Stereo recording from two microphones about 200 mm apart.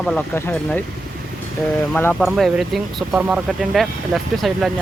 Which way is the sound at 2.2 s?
Centre (ahead or behind).